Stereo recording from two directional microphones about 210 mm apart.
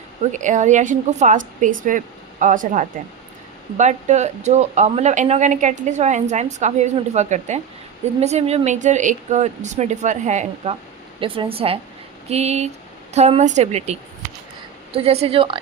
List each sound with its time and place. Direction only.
0.3 s a woman's voice: 35° right (ahead or behind)